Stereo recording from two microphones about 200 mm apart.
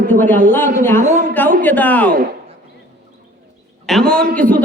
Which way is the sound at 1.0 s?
40° right (ahead or behind).